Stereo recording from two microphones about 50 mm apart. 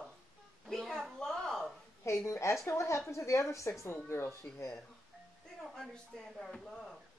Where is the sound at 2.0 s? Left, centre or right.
Left.